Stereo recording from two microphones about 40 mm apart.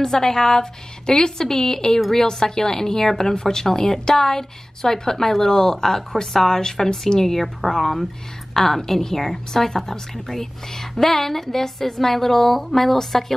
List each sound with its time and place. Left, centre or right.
0.0 s a woman's voice: centre